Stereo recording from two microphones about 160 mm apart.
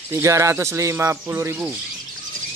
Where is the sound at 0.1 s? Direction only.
20° right (ahead or behind).